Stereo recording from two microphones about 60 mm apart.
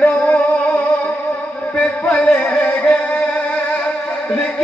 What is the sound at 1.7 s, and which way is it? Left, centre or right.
Music, left.